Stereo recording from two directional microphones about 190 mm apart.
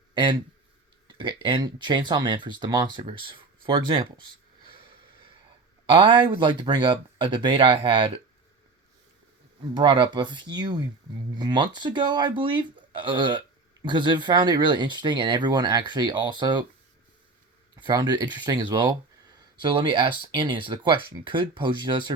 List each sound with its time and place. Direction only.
0.1 s speech: 25° right (ahead or behind)
9.7 s speech: 25° right (ahead or behind)
17.7 s speech: 25° right (ahead or behind)